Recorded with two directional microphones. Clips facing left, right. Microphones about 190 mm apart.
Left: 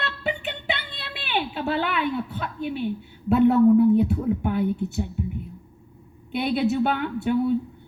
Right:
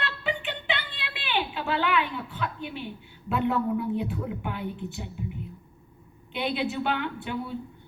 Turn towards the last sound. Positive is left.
turn(degrees=40)  # may be behind; listen again after turning